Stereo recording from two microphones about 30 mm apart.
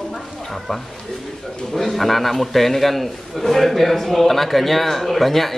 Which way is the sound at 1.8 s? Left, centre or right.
Centre.